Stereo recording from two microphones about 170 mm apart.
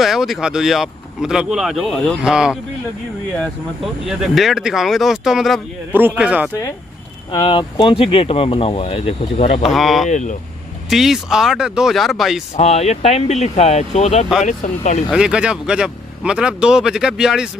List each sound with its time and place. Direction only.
0.0 s speech: centre (ahead or behind)
7.3 s speech: 30° left (ahead or behind)
9.6 s speech: centre (ahead or behind)
10.0 s speech: 45° left (ahead or behind)
10.9 s speech: centre (ahead or behind)
12.5 s speech: 40° left (ahead or behind)
15.0 s speech: 5° right (ahead or behind)